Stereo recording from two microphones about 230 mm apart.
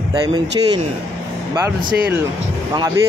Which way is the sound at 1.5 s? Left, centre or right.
Centre.